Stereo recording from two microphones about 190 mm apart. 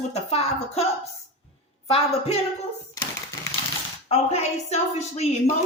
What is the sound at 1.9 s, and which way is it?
Speech, 35° left (ahead or behind).